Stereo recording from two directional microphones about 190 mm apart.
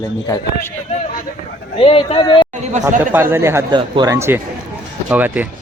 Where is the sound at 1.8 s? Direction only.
30° left (ahead or behind).